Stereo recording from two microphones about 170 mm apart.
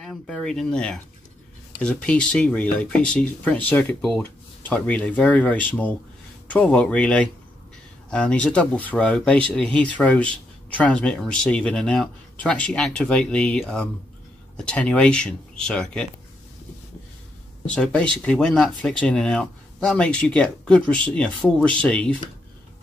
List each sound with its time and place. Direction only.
0.0 s speech: 5° left (ahead or behind)
17.6 s speech: 5° left (ahead or behind)